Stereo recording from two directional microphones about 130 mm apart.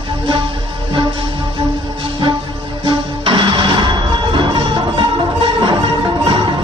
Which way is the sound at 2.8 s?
40° right (ahead or behind).